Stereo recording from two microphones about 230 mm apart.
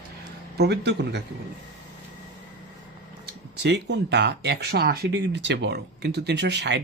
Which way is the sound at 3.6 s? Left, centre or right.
Right.